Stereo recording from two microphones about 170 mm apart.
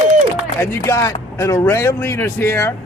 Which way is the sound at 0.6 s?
15° left (ahead or behind).